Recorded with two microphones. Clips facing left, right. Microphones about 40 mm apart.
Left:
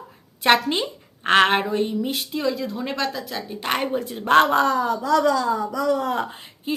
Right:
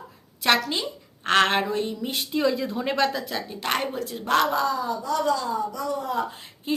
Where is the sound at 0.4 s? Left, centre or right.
Left.